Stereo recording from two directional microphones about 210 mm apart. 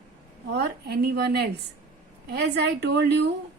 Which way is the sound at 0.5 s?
50° right (ahead or behind).